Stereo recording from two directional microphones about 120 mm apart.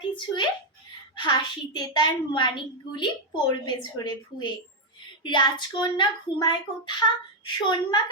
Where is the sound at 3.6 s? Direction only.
40° left (ahead or behind).